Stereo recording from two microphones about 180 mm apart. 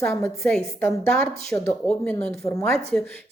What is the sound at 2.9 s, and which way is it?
Speech, 5° left (ahead or behind).